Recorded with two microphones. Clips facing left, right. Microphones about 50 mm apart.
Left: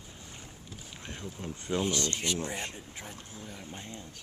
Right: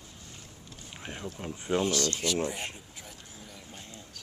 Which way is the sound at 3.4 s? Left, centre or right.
Left.